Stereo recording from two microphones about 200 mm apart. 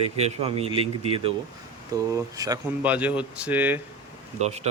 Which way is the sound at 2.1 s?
15° right (ahead or behind).